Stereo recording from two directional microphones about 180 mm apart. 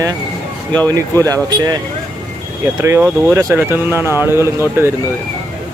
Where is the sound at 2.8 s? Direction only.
15° right (ahead or behind).